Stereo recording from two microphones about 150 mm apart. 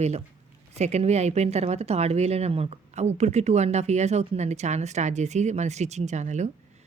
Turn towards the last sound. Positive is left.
turn(degrees=-50)  # may be behind; listen again after turning